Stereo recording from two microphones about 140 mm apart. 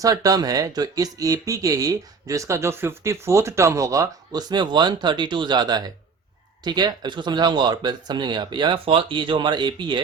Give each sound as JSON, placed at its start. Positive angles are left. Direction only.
{"t": 0.0, "sound": "speech", "side_deg": -25}